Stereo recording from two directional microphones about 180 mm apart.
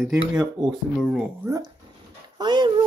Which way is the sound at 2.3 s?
25° right (ahead or behind).